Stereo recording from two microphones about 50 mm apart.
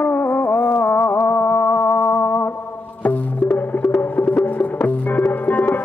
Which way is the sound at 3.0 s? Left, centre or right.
Left.